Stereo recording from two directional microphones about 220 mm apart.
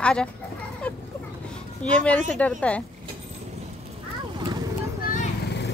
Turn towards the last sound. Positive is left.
turn(degrees=40)  # may be behind; listen again after turning